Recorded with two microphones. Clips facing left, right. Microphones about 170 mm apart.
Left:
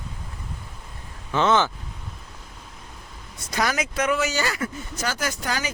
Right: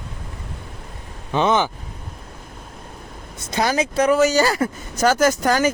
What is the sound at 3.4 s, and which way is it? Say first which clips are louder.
Speech: right 5 dB; 25° right (ahead or behind).